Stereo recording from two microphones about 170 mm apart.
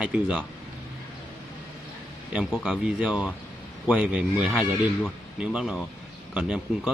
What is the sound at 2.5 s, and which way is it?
Speech, centre (ahead or behind).